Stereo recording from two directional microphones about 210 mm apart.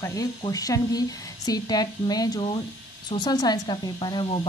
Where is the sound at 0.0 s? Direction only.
15° left (ahead or behind).